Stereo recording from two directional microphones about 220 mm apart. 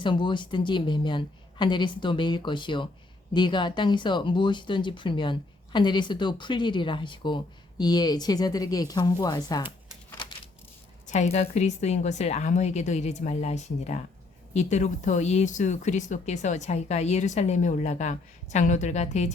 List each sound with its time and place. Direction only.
0.0 s speech: 20° left (ahead or behind)
10.2 s a sound: 20° left (ahead or behind)
11.0 s speech: 30° left (ahead or behind)